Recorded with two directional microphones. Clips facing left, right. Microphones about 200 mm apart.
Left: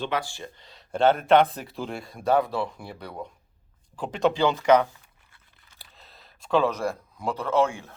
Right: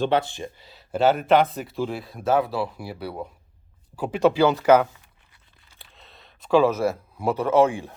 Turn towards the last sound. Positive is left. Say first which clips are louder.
# right 5 dB
turn(degrees=-15)  # may be behind; listen again after turning